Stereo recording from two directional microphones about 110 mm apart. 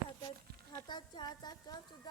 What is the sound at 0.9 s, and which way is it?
Speech, 40° left (ahead or behind).